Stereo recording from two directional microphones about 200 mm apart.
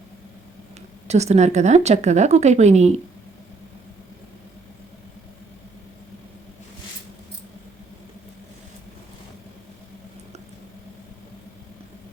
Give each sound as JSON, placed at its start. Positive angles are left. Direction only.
{"t": 1.0, "sound": "a woman's voice", "side_deg": -35}